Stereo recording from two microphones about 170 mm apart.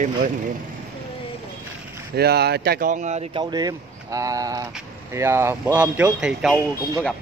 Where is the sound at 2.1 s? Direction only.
70° right (ahead or behind); by 3.2 s 45° right (ahead or behind).